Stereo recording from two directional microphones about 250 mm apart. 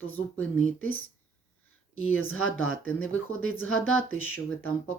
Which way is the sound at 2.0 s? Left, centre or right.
Left.